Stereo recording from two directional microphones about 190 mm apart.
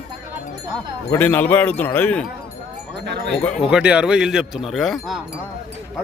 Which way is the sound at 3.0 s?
65° right (ahead or behind).